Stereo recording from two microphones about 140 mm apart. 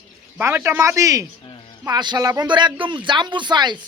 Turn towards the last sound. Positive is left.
turn(degrees=-30)  # may be behind; listen again after turning